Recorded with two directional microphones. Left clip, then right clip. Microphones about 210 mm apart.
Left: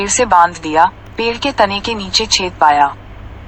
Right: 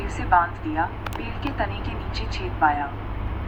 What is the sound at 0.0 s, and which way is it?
Speech, 50° left (ahead or behind).